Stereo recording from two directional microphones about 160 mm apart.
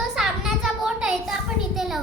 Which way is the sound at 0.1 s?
Centre (ahead or behind).